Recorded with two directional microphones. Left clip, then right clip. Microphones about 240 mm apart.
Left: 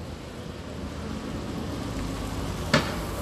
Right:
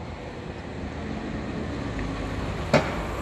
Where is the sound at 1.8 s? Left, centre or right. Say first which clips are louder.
Right 2 dB; left.